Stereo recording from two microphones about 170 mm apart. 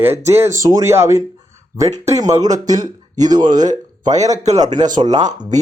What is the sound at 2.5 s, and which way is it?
Speech, 45° right (ahead or behind).